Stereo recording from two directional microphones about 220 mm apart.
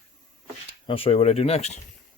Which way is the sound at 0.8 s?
25° left (ahead or behind).